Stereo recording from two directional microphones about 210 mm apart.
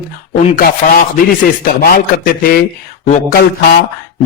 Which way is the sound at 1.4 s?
45° left (ahead or behind).